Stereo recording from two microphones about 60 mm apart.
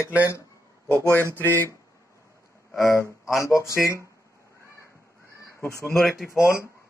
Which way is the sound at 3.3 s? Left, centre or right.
Left.